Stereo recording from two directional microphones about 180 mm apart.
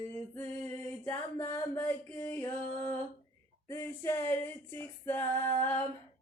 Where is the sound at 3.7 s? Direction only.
15° left (ahead or behind).